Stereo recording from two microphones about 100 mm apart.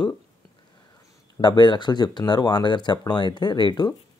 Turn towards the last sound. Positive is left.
turn(degrees=50)  # may be behind; listen again after turning